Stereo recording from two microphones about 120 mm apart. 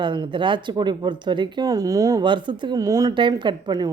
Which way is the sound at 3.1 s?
40° right (ahead or behind).